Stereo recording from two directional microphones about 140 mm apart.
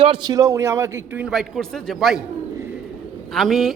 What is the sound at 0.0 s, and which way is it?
A man's voice, 35° right (ahead or behind).